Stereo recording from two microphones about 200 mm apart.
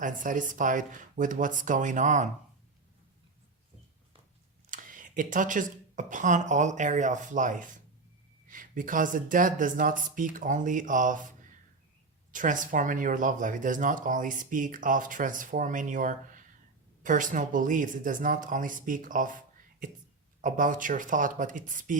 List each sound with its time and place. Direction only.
0.0 s speech: 40° right (ahead or behind)
4.7 s speech: 40° right (ahead or behind)
12.3 s speech: 40° right (ahead or behind)